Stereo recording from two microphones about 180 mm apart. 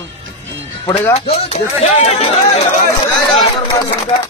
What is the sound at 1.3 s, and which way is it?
Speech, 35° left (ahead or behind).